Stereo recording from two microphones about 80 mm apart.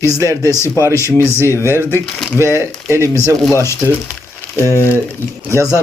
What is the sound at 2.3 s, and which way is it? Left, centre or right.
Speech, right.